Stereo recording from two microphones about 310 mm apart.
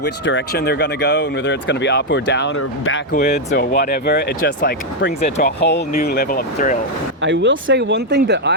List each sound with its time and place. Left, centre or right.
0.0 s speech: left
3.1 s speech: left
7.2 s speech: right